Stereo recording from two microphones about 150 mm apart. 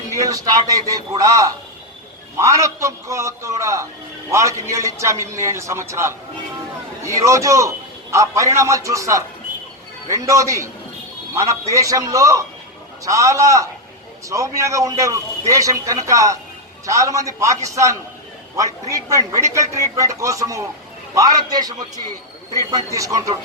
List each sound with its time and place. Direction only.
0.1 s a man's voice: 20° right (ahead or behind)
9.5 s music: 70° right (ahead or behind)
10.1 s a man's voice: 20° right (ahead or behind)